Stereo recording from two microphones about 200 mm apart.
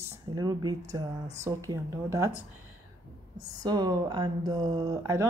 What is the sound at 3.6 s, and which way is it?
Speech, 20° right (ahead or behind).